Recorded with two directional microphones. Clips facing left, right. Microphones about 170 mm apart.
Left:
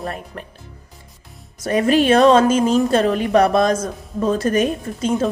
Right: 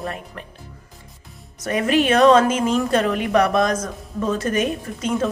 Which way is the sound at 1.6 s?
35° left (ahead or behind).